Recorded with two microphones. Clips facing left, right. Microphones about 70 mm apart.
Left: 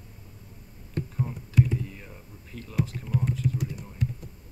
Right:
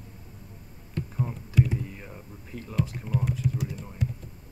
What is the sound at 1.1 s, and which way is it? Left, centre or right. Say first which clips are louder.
Speech: even; centre.